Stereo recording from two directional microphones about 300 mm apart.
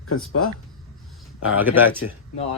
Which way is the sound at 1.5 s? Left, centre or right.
Centre.